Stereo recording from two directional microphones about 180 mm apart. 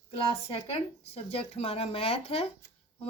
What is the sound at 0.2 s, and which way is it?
A woman's voice, 35° left (ahead or behind).